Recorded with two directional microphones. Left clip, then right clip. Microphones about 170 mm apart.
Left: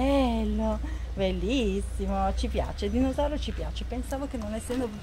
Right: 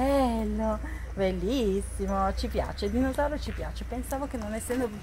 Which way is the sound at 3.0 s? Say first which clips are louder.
Even; 5° left (ahead or behind).